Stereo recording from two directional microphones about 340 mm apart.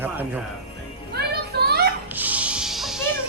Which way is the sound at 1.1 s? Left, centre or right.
Right.